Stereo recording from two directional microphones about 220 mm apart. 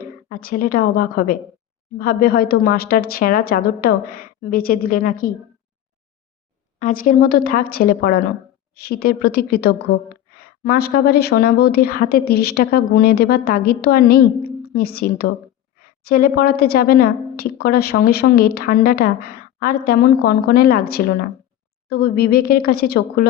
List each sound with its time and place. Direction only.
0.3 s speech: 40° left (ahead or behind)
6.7 s a woman's voice: 35° left (ahead or behind)